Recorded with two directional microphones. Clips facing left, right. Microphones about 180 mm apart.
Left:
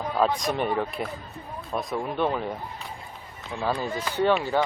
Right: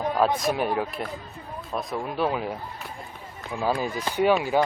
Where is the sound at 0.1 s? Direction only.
15° right (ahead or behind).